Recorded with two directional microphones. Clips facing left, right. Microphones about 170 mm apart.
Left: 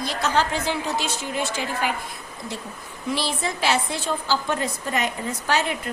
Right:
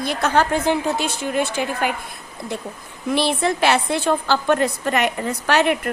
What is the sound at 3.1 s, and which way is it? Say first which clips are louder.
A woman's voice: right 7 dB; 60° right (ahead or behind).